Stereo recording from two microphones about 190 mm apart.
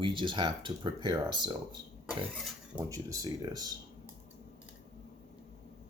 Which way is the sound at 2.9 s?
20° right (ahead or behind).